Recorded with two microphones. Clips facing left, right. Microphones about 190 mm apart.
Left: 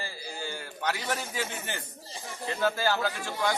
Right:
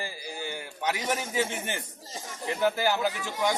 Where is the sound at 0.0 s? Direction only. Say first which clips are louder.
Right 2 dB; 15° right (ahead or behind).